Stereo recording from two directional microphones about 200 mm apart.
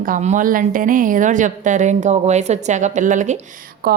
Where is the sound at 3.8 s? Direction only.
50° right (ahead or behind).